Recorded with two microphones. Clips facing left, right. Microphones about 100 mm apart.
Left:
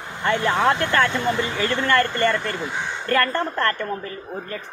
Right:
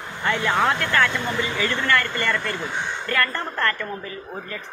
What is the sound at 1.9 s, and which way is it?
Speech, 40° left (ahead or behind).